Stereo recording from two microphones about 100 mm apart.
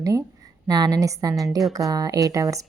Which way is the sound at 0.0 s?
35° right (ahead or behind).